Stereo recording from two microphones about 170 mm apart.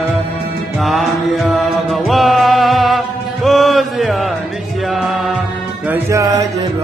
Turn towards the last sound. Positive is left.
turn(degrees=-15)  # may be behind; listen again after turning